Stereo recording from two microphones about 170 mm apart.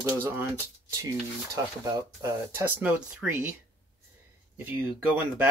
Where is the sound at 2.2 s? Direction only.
15° right (ahead or behind).